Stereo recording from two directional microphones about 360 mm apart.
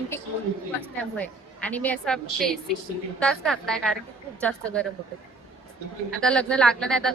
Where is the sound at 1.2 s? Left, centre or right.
Centre.